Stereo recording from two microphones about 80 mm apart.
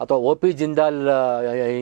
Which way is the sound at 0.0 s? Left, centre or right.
Right.